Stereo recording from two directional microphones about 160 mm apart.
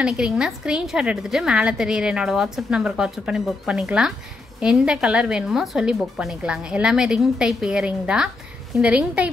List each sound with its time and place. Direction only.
0.0 s a woman's voice: 5° right (ahead or behind)